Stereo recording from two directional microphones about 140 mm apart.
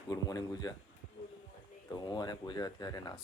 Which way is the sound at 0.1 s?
25° left (ahead or behind).